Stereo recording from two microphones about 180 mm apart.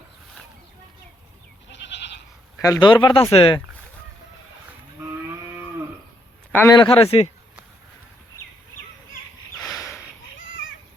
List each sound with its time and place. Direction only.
1.7 s goat: 80° left
2.6 s speech: 20° left (ahead or behind)
6.5 s a man's voice: 10° left (ahead or behind)
6.7 s a man's voice: 30° left (ahead or behind)